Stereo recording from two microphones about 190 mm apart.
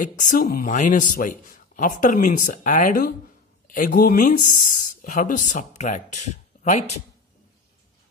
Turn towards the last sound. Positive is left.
turn(degrees=35)  # may be behind; listen again after turning